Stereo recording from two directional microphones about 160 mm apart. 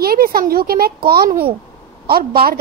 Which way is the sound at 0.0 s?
70° right (ahead or behind).